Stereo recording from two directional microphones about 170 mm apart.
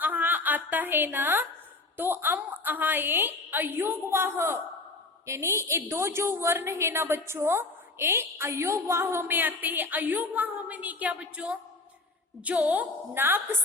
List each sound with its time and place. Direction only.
0.0 s a woman's voice: 10° right (ahead or behind)